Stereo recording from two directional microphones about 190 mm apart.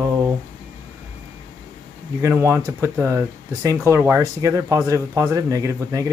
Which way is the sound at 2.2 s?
15° right (ahead or behind).